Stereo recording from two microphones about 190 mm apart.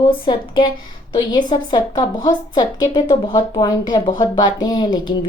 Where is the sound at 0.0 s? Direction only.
25° left (ahead or behind).